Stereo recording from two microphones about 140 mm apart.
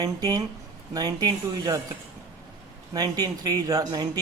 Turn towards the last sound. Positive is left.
turn(degrees=-25)  # may be behind; listen again after turning